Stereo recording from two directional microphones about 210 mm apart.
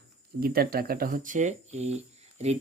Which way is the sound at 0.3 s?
45° right (ahead or behind).